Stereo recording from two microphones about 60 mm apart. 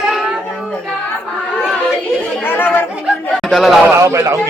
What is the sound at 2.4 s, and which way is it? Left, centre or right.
Chatter, left.